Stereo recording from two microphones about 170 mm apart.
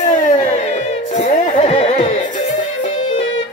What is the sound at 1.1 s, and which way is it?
Music, 45° left (ahead or behind).